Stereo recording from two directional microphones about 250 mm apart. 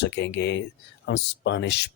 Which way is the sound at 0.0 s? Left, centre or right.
Left.